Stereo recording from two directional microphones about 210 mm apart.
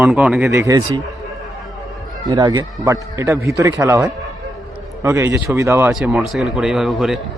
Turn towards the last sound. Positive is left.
turn(degrees=0)  # may be behind; listen again after turning